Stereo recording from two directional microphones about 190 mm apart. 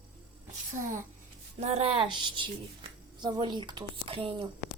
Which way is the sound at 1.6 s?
35° right (ahead or behind).